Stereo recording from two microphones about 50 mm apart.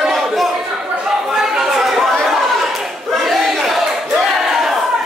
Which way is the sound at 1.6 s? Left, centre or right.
Centre.